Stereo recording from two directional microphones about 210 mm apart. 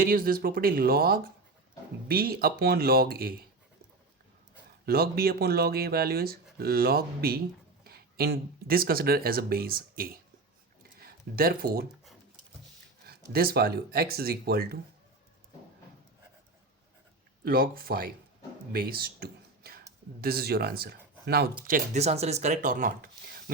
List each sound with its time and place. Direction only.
0.0 s speech: 40° right (ahead or behind)
4.5 s speech: 45° right (ahead or behind)
13.3 s speech: 45° right (ahead or behind)
17.4 s speech: 45° right (ahead or behind)
21.6 s speech: 35° right (ahead or behind)